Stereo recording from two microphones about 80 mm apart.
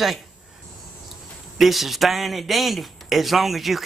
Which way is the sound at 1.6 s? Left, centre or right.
Centre.